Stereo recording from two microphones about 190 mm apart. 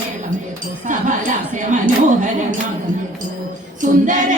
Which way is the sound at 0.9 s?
45° right (ahead or behind).